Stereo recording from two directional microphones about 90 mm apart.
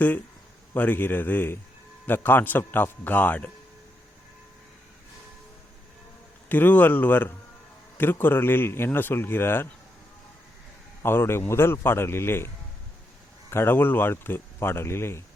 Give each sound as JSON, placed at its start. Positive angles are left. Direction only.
{"t": 0.7, "sound": "speech", "side_deg": 20}
{"t": 6.5, "sound": "speech", "side_deg": 20}
{"t": 11.0, "sound": "speech", "side_deg": 25}
{"t": 13.5, "sound": "speech", "side_deg": 25}